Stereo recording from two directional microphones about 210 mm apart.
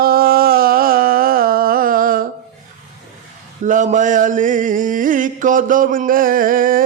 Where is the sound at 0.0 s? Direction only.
45° right (ahead or behind).